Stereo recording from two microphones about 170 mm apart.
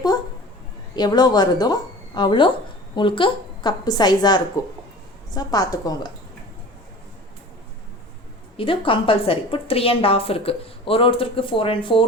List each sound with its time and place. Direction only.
0.9 s a woman's voice: 25° left (ahead or behind)
8.5 s a woman's voice: 30° left (ahead or behind)